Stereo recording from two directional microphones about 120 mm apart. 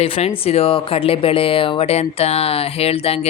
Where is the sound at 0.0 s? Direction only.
55° left (ahead or behind).